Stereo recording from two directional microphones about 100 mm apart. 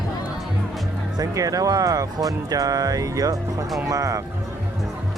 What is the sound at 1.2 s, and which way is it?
Speech, 35° right (ahead or behind).